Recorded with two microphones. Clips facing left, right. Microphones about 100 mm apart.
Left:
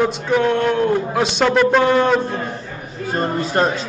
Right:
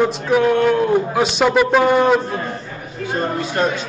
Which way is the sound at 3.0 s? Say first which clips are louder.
Left 1 dB; 40° left (ahead or behind).